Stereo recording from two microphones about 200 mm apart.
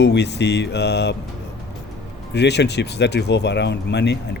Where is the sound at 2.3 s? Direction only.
60° left (ahead or behind).